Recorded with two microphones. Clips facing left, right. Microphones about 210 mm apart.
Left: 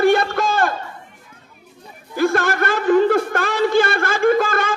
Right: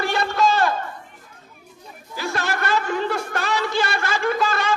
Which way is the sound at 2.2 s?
50° left (ahead or behind).